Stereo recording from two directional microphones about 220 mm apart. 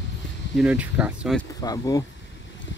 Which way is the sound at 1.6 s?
15° left (ahead or behind).